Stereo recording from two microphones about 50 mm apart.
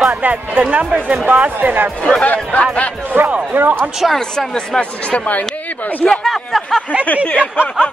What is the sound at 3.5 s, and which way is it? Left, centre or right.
Speech, right.